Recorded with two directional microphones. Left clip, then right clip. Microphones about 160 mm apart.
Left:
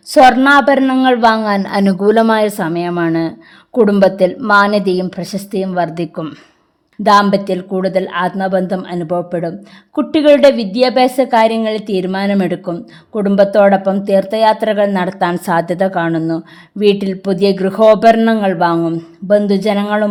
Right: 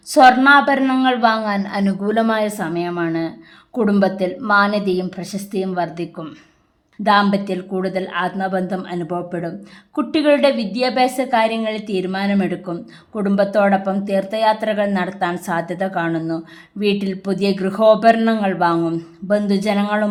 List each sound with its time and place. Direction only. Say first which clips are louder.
0.1 s speech: left 3 dB; 35° left (ahead or behind)